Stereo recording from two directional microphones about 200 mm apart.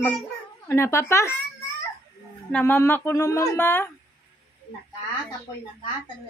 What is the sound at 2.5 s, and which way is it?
Speech, 10° left (ahead or behind).